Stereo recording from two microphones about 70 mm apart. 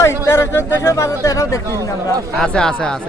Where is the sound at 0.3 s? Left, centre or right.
Left.